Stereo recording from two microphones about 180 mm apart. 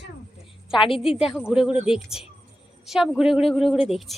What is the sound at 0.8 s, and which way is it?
Speech, 30° left (ahead or behind).